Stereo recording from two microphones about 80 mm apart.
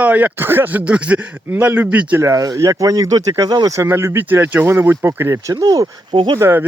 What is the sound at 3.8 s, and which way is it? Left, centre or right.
Speech, right.